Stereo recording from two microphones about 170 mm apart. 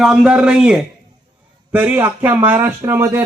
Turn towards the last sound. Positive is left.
turn(degrees=-15)  # may be behind; listen again after turning